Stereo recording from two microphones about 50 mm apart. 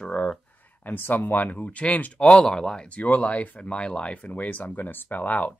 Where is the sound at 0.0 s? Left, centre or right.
Left.